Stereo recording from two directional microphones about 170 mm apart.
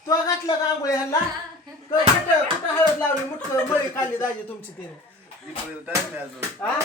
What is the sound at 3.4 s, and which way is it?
Speech, 15° left (ahead or behind).